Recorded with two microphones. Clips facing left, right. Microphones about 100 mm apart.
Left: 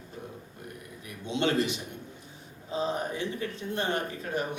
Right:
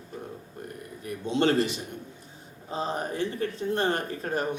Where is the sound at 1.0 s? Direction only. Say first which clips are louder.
Right 4 dB; 40° right (ahead or behind).